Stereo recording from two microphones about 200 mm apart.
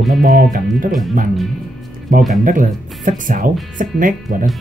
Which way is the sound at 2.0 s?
45° right (ahead or behind).